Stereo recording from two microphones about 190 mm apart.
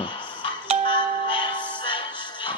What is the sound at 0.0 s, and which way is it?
Telephone dialing, 25° left (ahead or behind).